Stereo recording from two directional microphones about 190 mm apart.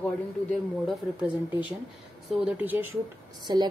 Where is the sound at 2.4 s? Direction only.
5° right (ahead or behind).